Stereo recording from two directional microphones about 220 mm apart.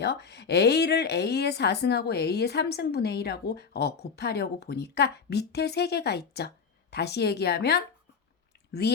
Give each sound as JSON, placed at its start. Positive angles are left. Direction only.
{"t": 0.0, "sound": "speech", "side_deg": 50}